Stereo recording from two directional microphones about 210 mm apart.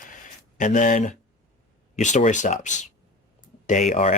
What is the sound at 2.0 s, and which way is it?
Speech, 35° left (ahead or behind).